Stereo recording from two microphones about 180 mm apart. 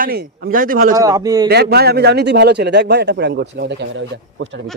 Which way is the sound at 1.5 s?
60° right (ahead or behind).